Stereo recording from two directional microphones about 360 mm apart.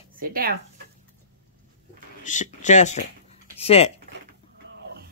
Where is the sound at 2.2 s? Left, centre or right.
Centre.